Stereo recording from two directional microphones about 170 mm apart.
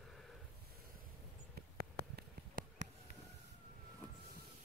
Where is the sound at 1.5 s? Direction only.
70° right (ahead or behind).